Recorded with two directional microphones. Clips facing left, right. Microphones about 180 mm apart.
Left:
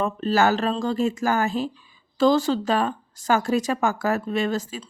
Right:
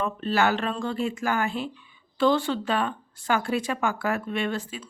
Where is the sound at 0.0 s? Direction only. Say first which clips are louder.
Left 4 dB; 40° left (ahead or behind).